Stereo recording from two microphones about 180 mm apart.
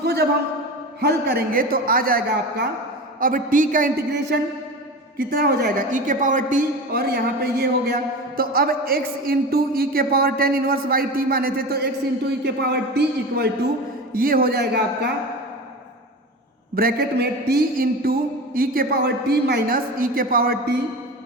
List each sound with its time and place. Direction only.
0.0 s a sound: 65° right (ahead or behind)
1.0 s a man's voice: 60° right (ahead or behind)
8.4 s a man's voice: 55° right (ahead or behind)
14.1 s a man's voice: 55° right (ahead or behind)
16.7 s a man's voice: 60° right (ahead or behind)